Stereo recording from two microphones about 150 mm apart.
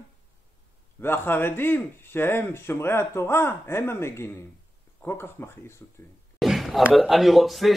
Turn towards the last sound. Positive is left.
turn(degrees=0)  # may be behind; listen again after turning